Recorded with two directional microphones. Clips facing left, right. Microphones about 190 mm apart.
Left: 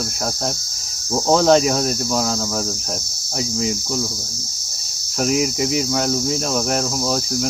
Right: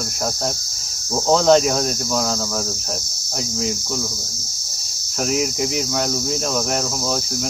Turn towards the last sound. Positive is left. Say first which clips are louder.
# left 2 dB
turn(degrees=0)  # may be behind; listen again after turning